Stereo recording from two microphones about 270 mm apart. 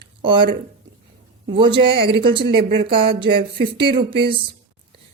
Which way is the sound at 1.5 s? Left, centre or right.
Centre.